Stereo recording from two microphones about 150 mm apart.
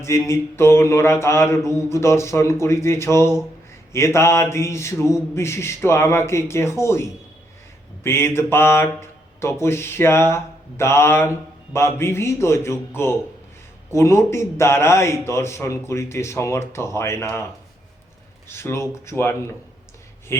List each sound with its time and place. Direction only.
0.0 s mantra: 20° left (ahead or behind)
8.0 s speech: 15° left (ahead or behind)
13.9 s mantra: 20° left (ahead or behind)
18.4 s speech: 15° left (ahead or behind)